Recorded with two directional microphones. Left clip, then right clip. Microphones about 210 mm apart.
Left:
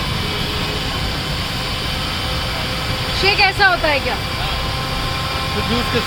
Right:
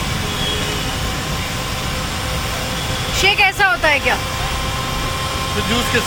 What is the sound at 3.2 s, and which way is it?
Speech, 5° right (ahead or behind).